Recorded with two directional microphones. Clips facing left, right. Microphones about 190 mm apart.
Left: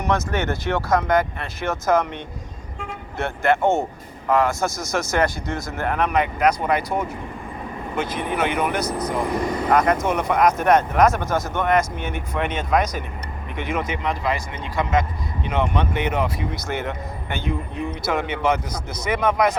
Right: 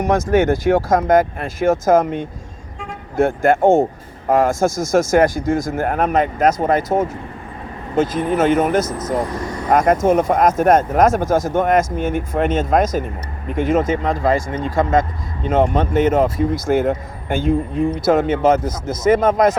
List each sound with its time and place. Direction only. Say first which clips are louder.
0.0 s speech: right 8 dB; 50° right (ahead or behind)
3.2 s speech: right 6 dB; 45° right (ahead or behind)
9.3 s speech: left 3 dB; 15° left (ahead or behind)
9.6 s speech: right 6 dB; 45° right (ahead or behind)